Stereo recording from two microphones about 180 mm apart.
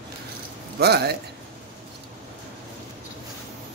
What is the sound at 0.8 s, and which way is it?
Speech, 65° right (ahead or behind).